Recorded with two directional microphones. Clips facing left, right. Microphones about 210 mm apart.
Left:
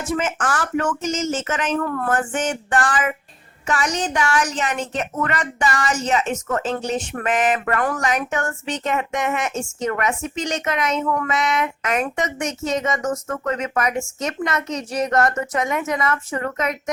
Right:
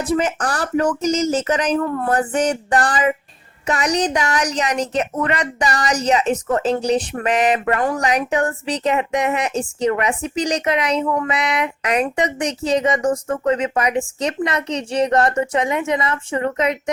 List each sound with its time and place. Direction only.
0.0 s speech: 35° right (ahead or behind)
7.6 s speech: 25° right (ahead or behind)